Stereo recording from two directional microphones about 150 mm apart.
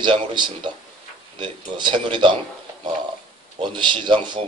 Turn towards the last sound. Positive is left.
turn(degrees=-30)  # may be behind; listen again after turning